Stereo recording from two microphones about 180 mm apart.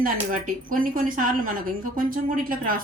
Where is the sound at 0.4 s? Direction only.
50° right (ahead or behind).